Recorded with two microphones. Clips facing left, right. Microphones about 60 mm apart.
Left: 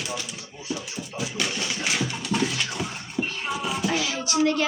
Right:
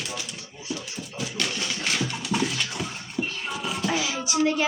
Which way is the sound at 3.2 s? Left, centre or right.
Centre.